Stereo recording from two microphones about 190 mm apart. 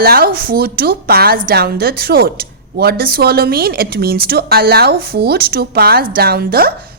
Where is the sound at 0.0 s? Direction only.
50° right (ahead or behind).